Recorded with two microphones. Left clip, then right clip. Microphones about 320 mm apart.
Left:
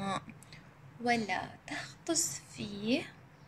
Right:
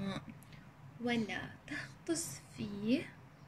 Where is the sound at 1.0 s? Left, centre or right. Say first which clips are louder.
Left 6 dB; centre.